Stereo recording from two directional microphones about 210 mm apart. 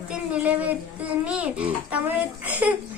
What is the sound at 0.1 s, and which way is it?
A child's voice, 5° right (ahead or behind).